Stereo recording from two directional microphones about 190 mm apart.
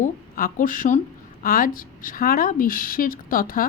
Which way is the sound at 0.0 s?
45° left (ahead or behind).